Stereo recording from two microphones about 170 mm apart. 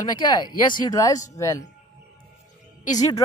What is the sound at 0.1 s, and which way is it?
Speech, 25° left (ahead or behind).